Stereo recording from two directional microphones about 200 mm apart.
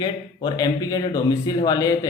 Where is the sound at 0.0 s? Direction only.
20° left (ahead or behind).